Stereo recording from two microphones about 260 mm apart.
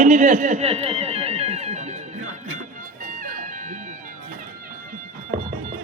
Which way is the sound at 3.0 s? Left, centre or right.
Right.